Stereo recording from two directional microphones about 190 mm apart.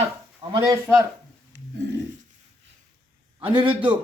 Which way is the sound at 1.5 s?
70° right (ahead or behind).